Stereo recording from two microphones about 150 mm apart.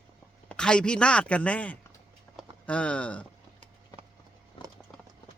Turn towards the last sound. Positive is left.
turn(degrees=30)  # may be behind; listen again after turning